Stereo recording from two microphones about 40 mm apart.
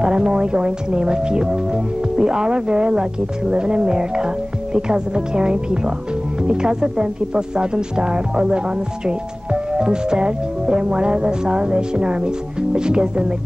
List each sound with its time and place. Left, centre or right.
0.0 s speech: right